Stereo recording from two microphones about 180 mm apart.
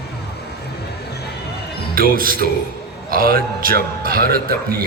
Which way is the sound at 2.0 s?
55° right (ahead or behind).